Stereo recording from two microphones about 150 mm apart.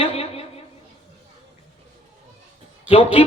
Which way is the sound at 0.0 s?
40° left (ahead or behind).